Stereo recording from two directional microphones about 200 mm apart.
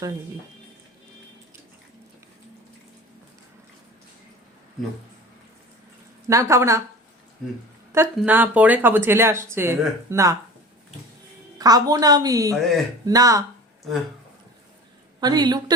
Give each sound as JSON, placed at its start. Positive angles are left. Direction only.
{"t": 6.2, "sound": "speech", "side_deg": -15}
{"t": 7.9, "sound": "speech", "side_deg": -10}
{"t": 11.5, "sound": "a woman's voice", "side_deg": -20}
{"t": 12.5, "sound": "speech", "side_deg": 0}
{"t": 13.1, "sound": "speech", "side_deg": -15}
{"t": 15.2, "sound": "a woman's voice", "side_deg": -20}